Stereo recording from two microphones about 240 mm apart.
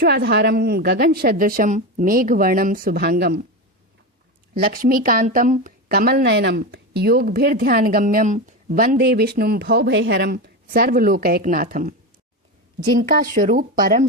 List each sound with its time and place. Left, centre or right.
0.0 s speech: right
4.5 s speech: right
13.0 s speech: right